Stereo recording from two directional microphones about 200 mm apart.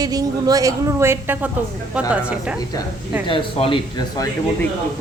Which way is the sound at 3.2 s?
25° left (ahead or behind).